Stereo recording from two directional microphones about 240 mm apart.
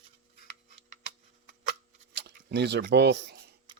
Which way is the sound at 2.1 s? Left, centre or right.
Right.